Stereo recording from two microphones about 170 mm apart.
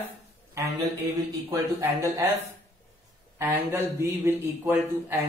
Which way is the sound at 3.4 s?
15° right (ahead or behind).